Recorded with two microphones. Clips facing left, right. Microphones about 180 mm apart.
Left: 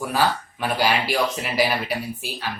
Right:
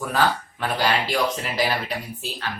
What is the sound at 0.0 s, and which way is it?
Speech, 10° left (ahead or behind).